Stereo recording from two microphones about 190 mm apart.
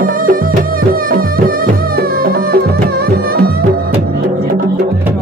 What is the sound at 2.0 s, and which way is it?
Music, 55° right (ahead or behind).